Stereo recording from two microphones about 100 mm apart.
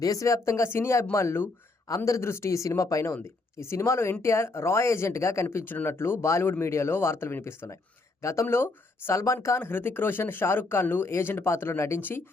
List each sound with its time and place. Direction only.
0.0 s speech: 35° left (ahead or behind)